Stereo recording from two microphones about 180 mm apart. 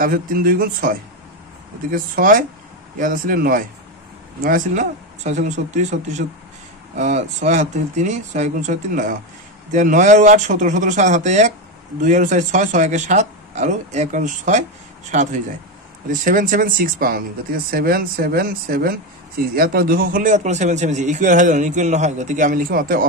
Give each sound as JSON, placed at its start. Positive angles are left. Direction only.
{"t": 0.0, "sound": "speech", "side_deg": -50}